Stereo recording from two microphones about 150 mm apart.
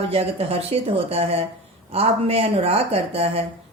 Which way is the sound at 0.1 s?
40° right (ahead or behind).